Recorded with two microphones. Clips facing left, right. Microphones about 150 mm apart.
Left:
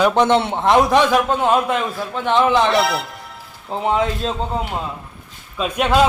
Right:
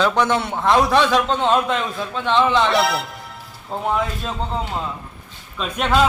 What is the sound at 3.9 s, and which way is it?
A man's voice, 20° left (ahead or behind).